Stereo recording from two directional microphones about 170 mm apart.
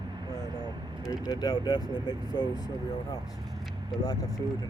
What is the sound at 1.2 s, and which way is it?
Speech, 20° left (ahead or behind).